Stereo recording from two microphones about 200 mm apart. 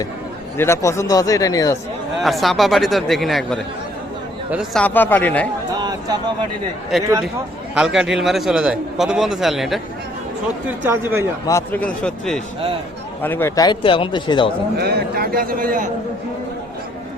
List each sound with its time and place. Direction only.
0.5 s speech: 10° left (ahead or behind)
2.1 s a man's voice: centre (ahead or behind)
5.7 s speech: 20° right (ahead or behind)
7.8 s a man's voice: 5° right (ahead or behind)
10.8 s speech: 10° right (ahead or behind)
11.4 s a man's voice: 10° left (ahead or behind)
13.7 s speech: 25° left (ahead or behind)
14.8 s a man's voice: 50° right (ahead or behind)